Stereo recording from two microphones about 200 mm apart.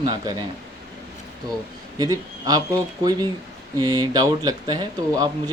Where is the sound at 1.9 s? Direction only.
20° right (ahead or behind).